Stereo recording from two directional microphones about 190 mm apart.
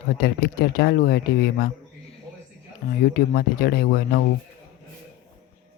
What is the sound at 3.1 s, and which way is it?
Speech, 50° left (ahead or behind).